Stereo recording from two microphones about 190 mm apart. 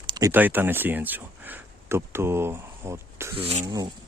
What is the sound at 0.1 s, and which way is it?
Speech, 15° right (ahead or behind).